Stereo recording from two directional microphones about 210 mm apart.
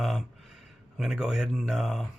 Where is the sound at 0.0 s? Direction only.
Centre (ahead or behind).